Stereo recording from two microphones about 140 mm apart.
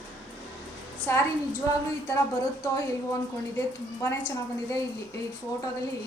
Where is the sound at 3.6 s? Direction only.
15° left (ahead or behind).